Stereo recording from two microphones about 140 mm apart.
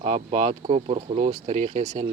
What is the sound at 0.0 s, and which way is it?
Speech, 50° right (ahead or behind).